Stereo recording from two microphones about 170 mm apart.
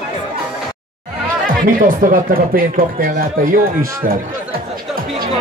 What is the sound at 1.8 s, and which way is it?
Speech, 55° right (ahead or behind).